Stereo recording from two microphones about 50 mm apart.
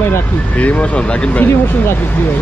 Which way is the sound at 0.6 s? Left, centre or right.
Left.